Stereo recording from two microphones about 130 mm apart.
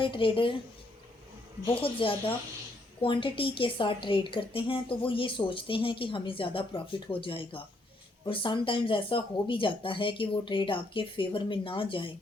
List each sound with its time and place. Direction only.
0.0 s a woman's voice: 40° left (ahead or behind)
1.7 s a woman's voice: 40° left (ahead or behind)